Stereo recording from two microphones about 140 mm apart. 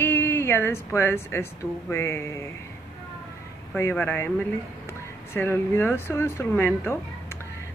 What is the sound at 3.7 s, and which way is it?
Speech, 15° left (ahead or behind).